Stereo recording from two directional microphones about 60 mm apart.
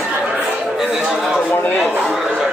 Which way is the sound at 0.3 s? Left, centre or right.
Centre.